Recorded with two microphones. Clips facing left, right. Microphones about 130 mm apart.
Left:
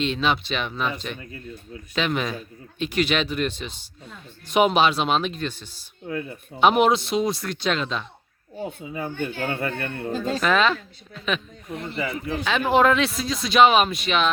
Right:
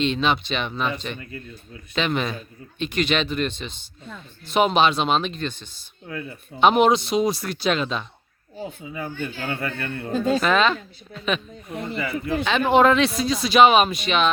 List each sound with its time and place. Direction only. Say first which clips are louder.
0.0 s speech: right 2 dB; 5° left (ahead or behind)
1.2 s speech: even; 20° left (ahead or behind)
2.0 s speech: right 1 dB; 5° left (ahead or behind)
6.1 s speech: left 3 dB; 25° left (ahead or behind)
6.6 s speech: right 1 dB; 5° left (ahead or behind)
8.9 s speech: left 1 dB; 25° left (ahead or behind)
10.2 s speech: right 1 dB; centre (ahead or behind)